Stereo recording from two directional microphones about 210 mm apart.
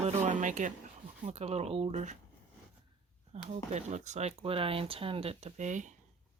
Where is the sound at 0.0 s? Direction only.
35° right (ahead or behind).